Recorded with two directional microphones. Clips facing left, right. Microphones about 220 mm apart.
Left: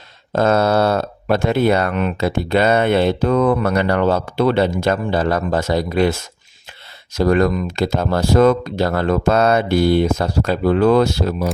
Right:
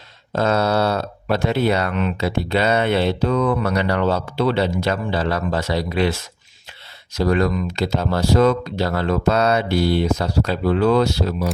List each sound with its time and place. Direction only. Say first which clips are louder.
0.3 s speech: left 3 dB; 50° left (ahead or behind)